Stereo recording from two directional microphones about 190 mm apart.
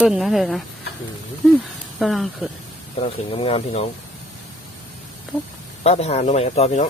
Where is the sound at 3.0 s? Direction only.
30° left (ahead or behind).